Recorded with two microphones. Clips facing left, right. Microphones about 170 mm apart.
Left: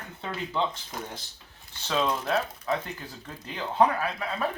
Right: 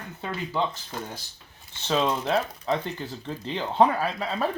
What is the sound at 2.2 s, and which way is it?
Speech, 20° right (ahead or behind).